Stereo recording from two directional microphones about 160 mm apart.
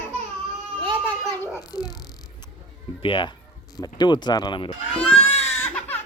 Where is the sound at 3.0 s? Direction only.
30° left (ahead or behind).